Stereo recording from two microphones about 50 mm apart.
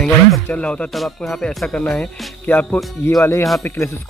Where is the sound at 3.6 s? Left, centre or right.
Left.